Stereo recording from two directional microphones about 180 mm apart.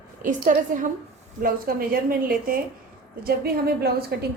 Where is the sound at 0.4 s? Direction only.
45° right (ahead or behind).